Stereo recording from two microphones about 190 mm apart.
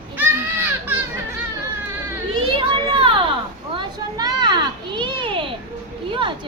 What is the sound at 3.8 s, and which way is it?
Children playing, 20° right (ahead or behind).